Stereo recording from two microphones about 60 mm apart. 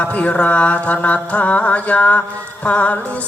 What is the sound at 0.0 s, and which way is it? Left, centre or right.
Mantra, left.